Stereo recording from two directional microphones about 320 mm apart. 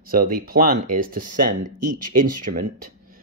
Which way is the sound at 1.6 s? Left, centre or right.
Right.